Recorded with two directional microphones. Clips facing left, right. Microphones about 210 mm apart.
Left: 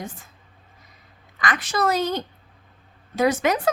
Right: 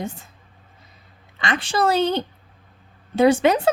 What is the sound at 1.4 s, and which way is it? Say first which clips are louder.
A woman's voice: right 2 dB; 30° right (ahead or behind).